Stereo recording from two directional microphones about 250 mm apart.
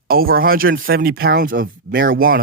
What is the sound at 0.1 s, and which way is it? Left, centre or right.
Speech, right.